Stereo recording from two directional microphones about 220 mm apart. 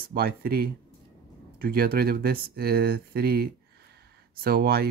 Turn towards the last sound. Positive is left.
turn(degrees=-45)  # may be behind; listen again after turning